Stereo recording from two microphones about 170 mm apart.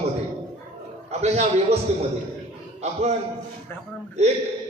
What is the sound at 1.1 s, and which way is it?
Speech, 40° right (ahead or behind).